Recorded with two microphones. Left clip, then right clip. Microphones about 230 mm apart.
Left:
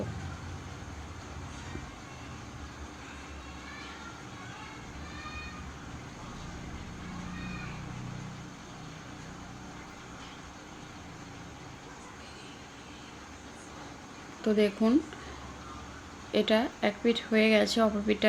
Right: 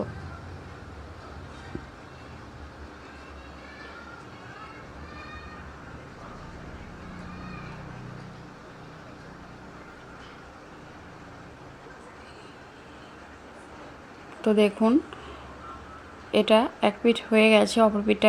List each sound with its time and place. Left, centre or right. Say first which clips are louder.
14.4 s speech: right 5 dB; centre
16.3 s speech: right 7 dB; centre